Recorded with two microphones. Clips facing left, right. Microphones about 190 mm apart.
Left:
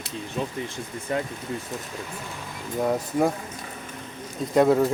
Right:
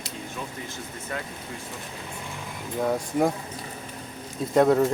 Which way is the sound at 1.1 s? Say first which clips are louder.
Left 7 dB; 20° left (ahead or behind).